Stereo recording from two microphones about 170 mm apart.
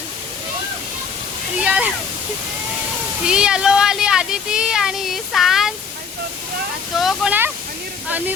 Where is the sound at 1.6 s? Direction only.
10° right (ahead or behind).